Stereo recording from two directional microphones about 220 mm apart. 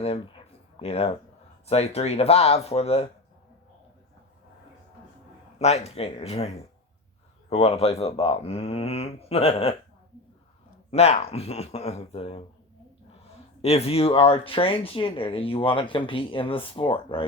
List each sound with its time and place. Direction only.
0.0 s a sound: 25° left (ahead or behind)
1.6 s speech: 25° left (ahead or behind)
5.5 s speech: 30° left (ahead or behind)
7.5 s speech: 30° left (ahead or behind)
10.9 s speech: 30° left (ahead or behind)
13.6 s speech: 30° left (ahead or behind)